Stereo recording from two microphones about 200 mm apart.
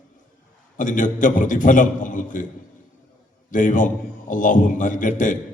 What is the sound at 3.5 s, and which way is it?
A man's voice, 40° left (ahead or behind).